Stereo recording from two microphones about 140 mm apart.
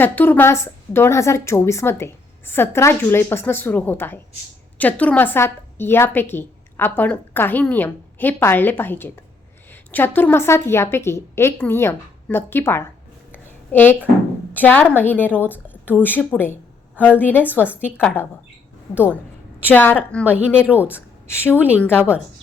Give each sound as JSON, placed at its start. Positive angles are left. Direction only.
{"t": 0.0, "sound": "a woman's voice", "side_deg": 15}
{"t": 13.3, "sound": "a sound", "side_deg": 15}
{"t": 14.5, "sound": "a woman's voice", "side_deg": 10}
{"t": 17.4, "sound": "a woman's voice", "side_deg": -10}
{"t": 17.7, "sound": "a woman's voice", "side_deg": 15}
{"t": 19.7, "sound": "a woman's voice", "side_deg": 15}
{"t": 20.7, "sound": "a woman's voice", "side_deg": -10}
{"t": 21.8, "sound": "a woman's voice", "side_deg": 15}